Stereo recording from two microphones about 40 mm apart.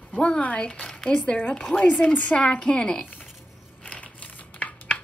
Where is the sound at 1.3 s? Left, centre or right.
Left.